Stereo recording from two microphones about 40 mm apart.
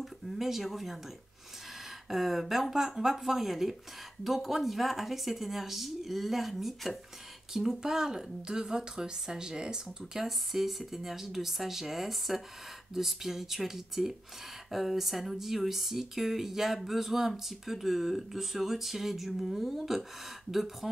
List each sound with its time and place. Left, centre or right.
0.0 s speech: centre
7.5 s speech: centre
9.8 s speech: centre